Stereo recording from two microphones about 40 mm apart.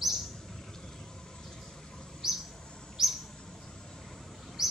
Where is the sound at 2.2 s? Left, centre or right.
Centre.